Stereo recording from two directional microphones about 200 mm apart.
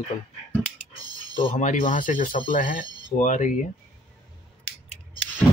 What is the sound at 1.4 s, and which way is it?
Speech, 40° left (ahead or behind).